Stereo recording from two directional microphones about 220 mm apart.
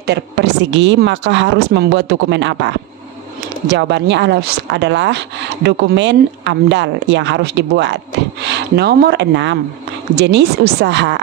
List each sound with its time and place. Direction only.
0.0 s speech: 50° right (ahead or behind)